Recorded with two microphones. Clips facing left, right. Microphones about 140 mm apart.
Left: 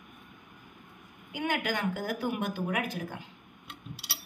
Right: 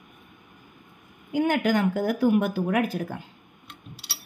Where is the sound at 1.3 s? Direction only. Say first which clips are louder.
Right 9 dB; 45° right (ahead or behind).